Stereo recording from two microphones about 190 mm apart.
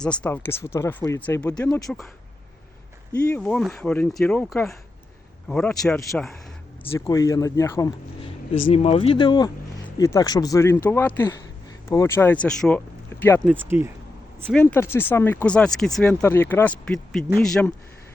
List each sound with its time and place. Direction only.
0.0 s speech: 5° left (ahead or behind)
3.2 s speech: 10° left (ahead or behind)
7.0 s speech: 20° left (ahead or behind)
8.7 s speech: 35° left (ahead or behind); by 13.5 s 10° left (ahead or behind)
13.5 s speech: 10° right (ahead or behind)
14.5 s speech: 10° left (ahead or behind)